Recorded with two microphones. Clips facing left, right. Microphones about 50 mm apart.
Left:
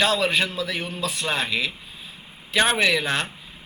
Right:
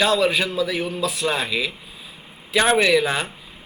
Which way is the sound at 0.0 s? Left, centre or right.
Centre.